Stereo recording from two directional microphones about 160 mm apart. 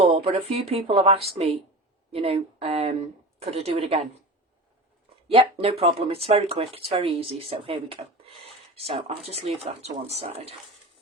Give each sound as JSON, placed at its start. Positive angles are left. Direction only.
{"t": 0.0, "sound": "speech", "side_deg": -40}
{"t": 5.3, "sound": "speech", "side_deg": -35}